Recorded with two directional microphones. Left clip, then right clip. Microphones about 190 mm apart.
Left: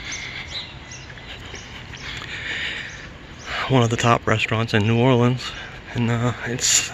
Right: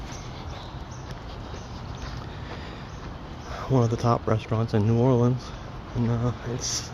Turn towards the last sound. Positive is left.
turn(degrees=20)  # may be behind; listen again after turning